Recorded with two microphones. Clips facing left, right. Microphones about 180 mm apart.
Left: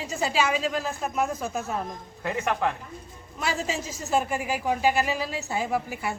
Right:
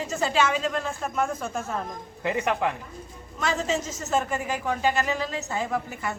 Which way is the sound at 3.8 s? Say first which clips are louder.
Right 1 dB; 45° right (ahead or behind).